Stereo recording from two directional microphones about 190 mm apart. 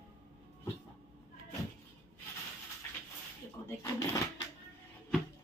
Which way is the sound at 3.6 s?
15° left (ahead or behind).